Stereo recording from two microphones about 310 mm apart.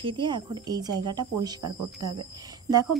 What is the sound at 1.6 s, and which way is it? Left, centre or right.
Speech, right.